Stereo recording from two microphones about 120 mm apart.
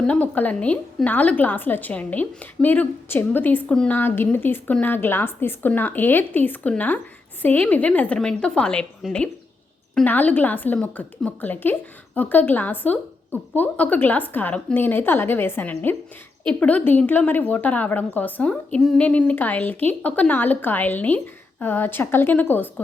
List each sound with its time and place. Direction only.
0.1 s a woman's voice: 15° left (ahead or behind)